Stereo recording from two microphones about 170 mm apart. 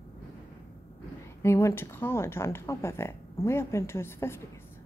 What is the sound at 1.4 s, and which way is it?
Speech, 15° left (ahead or behind).